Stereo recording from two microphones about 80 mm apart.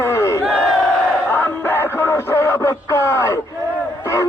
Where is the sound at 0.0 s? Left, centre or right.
Left.